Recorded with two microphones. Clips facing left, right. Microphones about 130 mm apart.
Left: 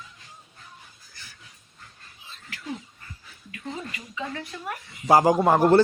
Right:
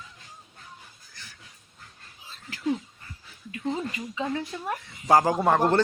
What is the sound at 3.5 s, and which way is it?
A woman's voice, 25° right (ahead or behind).